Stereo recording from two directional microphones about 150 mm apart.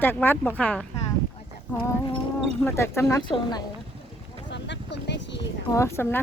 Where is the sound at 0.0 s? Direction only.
15° left (ahead or behind).